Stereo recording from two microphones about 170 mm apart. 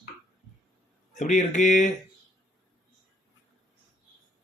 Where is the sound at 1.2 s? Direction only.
45° left (ahead or behind).